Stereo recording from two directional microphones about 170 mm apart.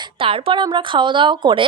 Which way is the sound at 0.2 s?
30° right (ahead or behind).